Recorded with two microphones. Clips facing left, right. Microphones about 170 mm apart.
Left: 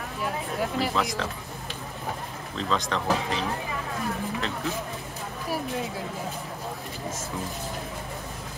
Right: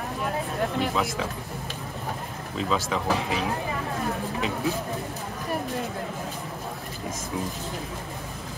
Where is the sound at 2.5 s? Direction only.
5° right (ahead or behind).